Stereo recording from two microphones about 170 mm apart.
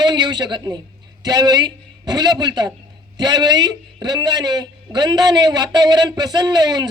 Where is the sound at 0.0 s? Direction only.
25° right (ahead or behind).